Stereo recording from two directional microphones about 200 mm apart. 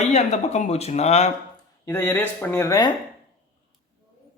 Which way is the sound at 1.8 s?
10° left (ahead or behind).